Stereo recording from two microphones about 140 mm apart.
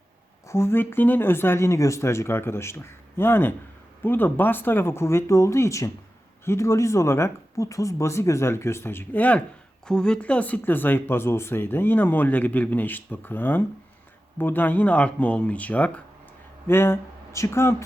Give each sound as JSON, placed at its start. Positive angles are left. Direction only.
{"t": 0.4, "sound": "speech", "side_deg": 20}